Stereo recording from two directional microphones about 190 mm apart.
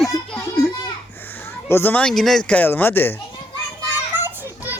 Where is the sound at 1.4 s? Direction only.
10° left (ahead or behind).